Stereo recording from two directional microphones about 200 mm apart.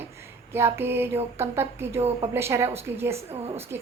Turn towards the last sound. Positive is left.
turn(degrees=-10)  # may be behind; listen again after turning